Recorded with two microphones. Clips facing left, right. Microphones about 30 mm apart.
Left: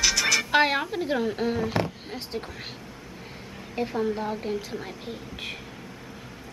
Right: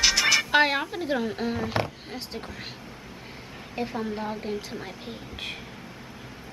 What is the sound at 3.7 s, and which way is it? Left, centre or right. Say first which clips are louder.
A woman's voice: left 3 dB; centre.